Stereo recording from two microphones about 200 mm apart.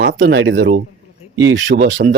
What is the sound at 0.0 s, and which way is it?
Speech, 60° right (ahead or behind).